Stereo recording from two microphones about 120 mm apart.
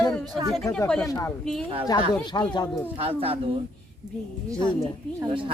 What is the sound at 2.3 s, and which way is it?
Speech, 35° left (ahead or behind).